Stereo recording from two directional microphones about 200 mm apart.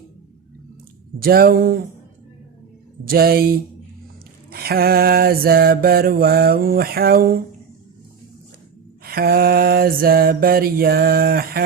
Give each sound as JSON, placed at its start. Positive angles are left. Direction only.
{"t": 1.2, "sound": "mantra", "side_deg": -50}
{"t": 3.1, "sound": "mantra", "side_deg": -50}
{"t": 9.0, "sound": "mantra", "side_deg": -50}